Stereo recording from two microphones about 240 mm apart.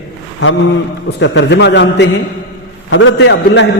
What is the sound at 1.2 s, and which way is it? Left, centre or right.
A man's voice, left.